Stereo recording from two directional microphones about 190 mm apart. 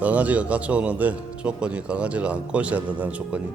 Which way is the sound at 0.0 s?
10° right (ahead or behind).